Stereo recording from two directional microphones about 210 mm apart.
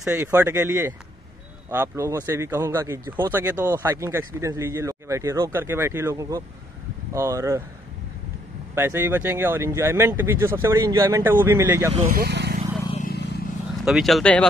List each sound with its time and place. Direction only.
0.0 s speech: 10° right (ahead or behind)
8.7 s speech: 10° right (ahead or behind)
11.9 s speech: 30° right (ahead or behind)
12.2 s speech: 50° right (ahead or behind)
13.0 s vehicle: 50° left (ahead or behind)
13.8 s speech: centre (ahead or behind)